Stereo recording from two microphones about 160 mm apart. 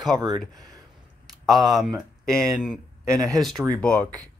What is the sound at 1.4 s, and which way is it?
Speech, centre (ahead or behind).